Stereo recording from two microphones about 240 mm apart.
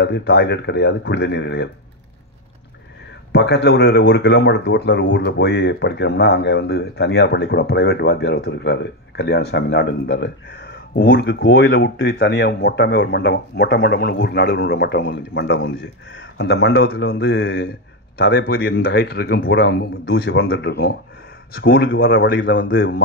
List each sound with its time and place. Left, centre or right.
0.0 s speech: left
3.3 s a man's voice: left
22.8 s speech: left